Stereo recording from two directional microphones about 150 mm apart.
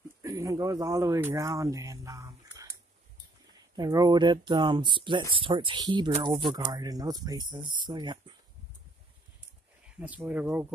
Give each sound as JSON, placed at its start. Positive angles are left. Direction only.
{"t": 0.2, "sound": "speech", "side_deg": -20}
{"t": 3.7, "sound": "speech", "side_deg": -25}
{"t": 9.9, "sound": "speech", "side_deg": -10}